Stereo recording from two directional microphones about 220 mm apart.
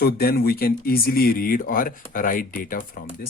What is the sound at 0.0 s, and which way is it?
Speech, 45° left (ahead or behind).